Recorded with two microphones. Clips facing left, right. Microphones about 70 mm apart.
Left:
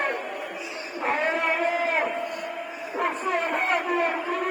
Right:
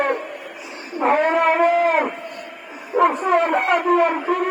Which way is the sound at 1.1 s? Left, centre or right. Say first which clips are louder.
Right 8 dB; right.